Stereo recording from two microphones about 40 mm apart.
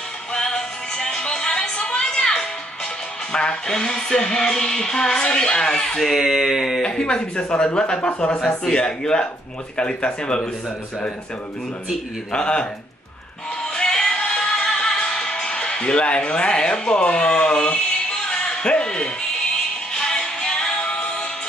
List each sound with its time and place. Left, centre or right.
0.3 s music: centre
6.1 s a sound: centre
6.8 s music: left
12.3 s music: left
13.7 s music: centre
17.0 s speech: left
19.9 s music: centre